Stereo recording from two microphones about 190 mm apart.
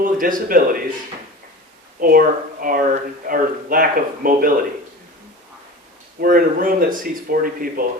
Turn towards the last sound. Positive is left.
turn(degrees=-50)  # may be behind; listen again after turning